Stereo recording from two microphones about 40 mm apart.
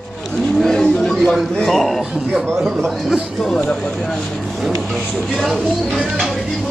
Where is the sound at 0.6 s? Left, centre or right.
Centre.